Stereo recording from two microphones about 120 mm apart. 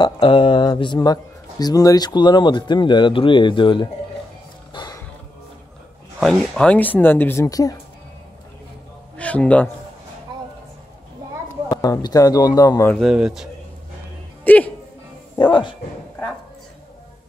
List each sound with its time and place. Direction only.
0.0 s speech: 40° left (ahead or behind)
4.7 s roaring cats: 35° left (ahead or behind)
6.1 s speech: centre (ahead or behind)
7.4 s speech: 30° left (ahead or behind)
9.1 s a sound: 10° left (ahead or behind)
11.7 s speech: 30° left (ahead or behind)
13.0 s speech: 5° right (ahead or behind)
14.4 s speech: 15° left (ahead or behind)
15.3 s speech: 40° left (ahead or behind)